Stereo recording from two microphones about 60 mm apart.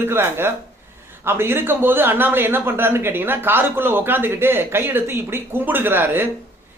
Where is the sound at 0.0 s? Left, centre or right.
Right.